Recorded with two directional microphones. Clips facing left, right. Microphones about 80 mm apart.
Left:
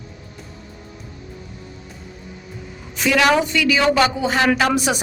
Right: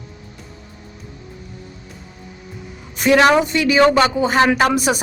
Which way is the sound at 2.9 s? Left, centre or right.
Right.